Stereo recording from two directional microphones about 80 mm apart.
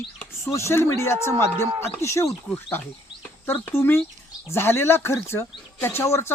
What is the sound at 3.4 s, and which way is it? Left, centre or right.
Speech, left.